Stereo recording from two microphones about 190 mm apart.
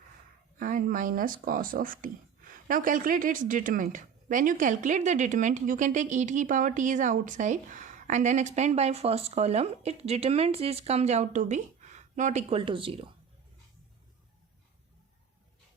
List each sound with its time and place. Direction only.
0.6 s speech: 45° right (ahead or behind); by 13.1 s 30° right (ahead or behind)